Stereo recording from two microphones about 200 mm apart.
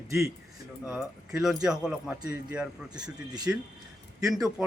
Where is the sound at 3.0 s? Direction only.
20° right (ahead or behind).